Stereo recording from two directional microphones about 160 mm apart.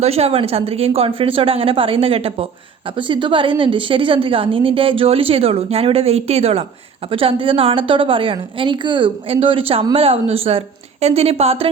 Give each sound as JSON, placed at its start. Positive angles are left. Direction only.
{"t": 0.0, "sound": "a woman's voice", "side_deg": -40}